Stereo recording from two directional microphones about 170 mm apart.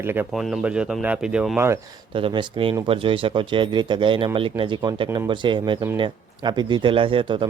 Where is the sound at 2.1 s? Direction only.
30° right (ahead or behind).